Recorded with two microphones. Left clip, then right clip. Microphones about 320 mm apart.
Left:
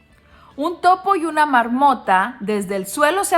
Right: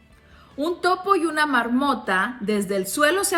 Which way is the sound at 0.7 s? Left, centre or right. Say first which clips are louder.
Left 5 dB; centre.